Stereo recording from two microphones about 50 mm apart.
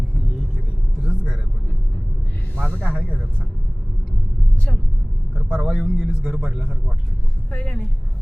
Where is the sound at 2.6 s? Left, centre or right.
Left.